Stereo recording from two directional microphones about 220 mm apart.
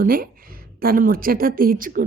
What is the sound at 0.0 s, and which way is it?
A woman's voice, 40° right (ahead or behind).